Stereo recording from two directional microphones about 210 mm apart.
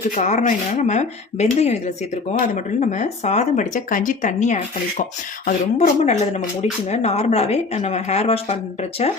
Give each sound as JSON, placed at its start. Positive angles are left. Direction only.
{"t": 0.2, "sound": "speech", "side_deg": 35}
{"t": 2.8, "sound": "speech", "side_deg": 35}